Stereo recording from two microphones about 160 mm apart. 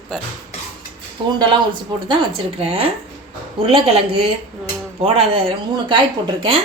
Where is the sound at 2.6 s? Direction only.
35° right (ahead or behind).